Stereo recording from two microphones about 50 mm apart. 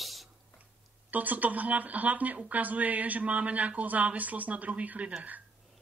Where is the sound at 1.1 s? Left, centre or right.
Right.